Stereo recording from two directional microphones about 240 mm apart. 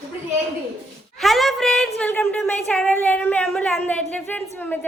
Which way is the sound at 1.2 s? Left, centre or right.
Centre.